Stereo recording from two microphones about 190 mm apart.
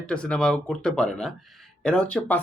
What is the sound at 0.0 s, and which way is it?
Speech, 5° left (ahead or behind).